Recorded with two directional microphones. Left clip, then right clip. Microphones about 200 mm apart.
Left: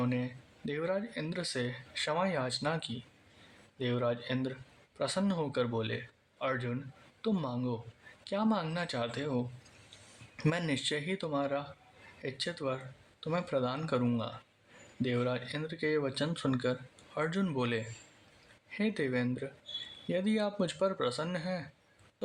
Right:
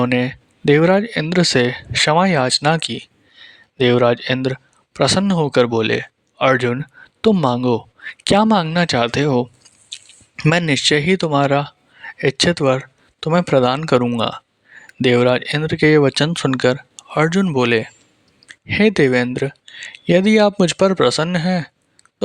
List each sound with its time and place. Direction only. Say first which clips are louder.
0.0 s speech: right 18 dB; 55° right (ahead or behind)
10.7 s speech: right 19 dB; 50° right (ahead or behind)